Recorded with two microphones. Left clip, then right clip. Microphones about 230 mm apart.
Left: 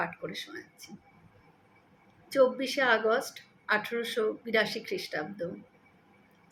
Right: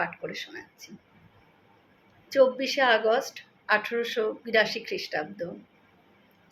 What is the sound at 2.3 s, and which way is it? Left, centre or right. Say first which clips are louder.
A woman's voice: right 3 dB; centre.